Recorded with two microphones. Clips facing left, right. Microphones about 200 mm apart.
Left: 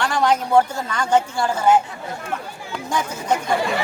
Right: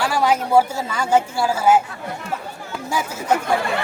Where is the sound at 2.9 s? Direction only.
5° right (ahead or behind).